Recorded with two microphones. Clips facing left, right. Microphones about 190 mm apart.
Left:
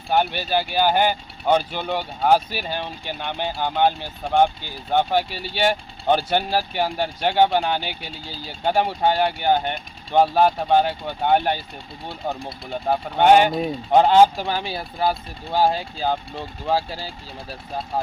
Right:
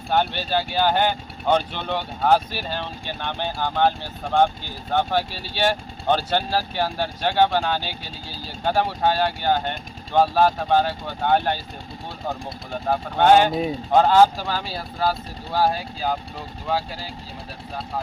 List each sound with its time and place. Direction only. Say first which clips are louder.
0.1 s speech: left 1 dB; 10° left (ahead or behind)
12.9 s speech: left 1 dB; 15° left (ahead or behind)
13.5 s speech: even; centre (ahead or behind)
13.9 s speech: left 1 dB; 20° left (ahead or behind)